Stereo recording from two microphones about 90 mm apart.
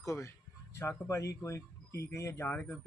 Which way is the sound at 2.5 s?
20° left (ahead or behind).